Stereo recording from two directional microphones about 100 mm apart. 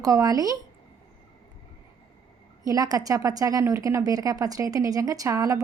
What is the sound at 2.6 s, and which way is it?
A woman's voice, 35° right (ahead or behind).